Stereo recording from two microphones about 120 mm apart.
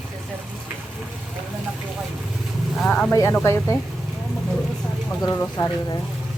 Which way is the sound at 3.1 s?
25° left (ahead or behind).